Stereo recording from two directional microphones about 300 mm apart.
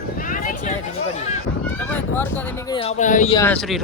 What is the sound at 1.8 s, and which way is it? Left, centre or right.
Speech, centre.